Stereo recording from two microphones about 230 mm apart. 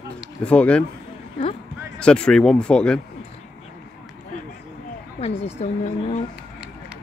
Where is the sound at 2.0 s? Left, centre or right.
Centre.